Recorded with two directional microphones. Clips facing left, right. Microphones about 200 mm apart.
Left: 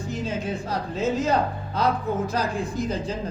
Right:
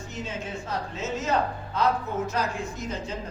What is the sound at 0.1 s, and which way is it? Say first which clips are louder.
A man's voice: left 6 dB; 35° left (ahead or behind).